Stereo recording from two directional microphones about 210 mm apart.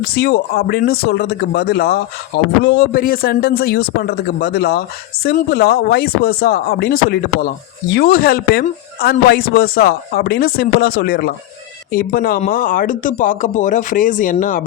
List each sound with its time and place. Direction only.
0.0 s speech: 45° left (ahead or behind)